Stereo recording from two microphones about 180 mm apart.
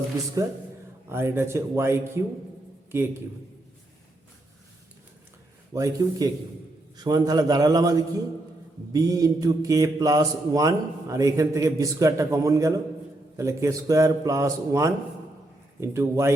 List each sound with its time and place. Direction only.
1.0 s a man's voice: 15° right (ahead or behind)
5.7 s a man's voice: 15° right (ahead or behind)